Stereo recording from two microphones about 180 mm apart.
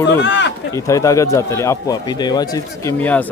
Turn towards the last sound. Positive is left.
turn(degrees=10)  # may be behind; listen again after turning